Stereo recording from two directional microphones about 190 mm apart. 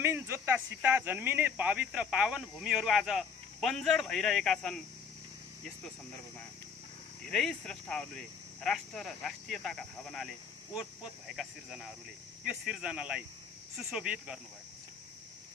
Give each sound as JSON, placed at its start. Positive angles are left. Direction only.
{"t": 0.0, "sound": "speech", "side_deg": -10}
{"t": 7.2, "sound": "speech", "side_deg": 5}